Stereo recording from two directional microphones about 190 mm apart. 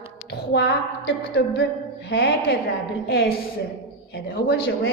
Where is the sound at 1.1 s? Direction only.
65° left (ahead or behind).